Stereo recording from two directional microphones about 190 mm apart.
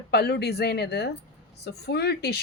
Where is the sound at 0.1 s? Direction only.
60° left (ahead or behind).